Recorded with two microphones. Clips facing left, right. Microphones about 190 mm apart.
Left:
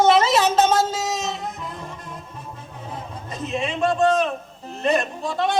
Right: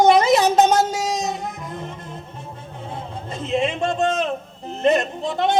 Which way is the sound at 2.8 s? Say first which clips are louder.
Right 2 dB; 25° right (ahead or behind).